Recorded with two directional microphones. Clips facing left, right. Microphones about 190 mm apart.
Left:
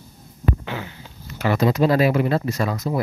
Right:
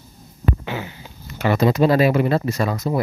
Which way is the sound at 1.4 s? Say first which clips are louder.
Right 2 dB; 25° right (ahead or behind).